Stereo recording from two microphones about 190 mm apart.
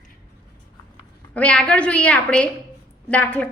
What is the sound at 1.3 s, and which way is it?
A woman's voice, 5° left (ahead or behind).